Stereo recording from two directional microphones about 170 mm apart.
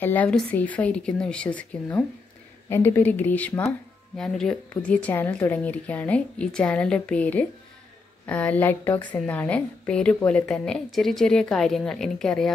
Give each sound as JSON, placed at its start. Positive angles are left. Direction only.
{"t": 0.0, "sound": "a woman's voice", "side_deg": 10}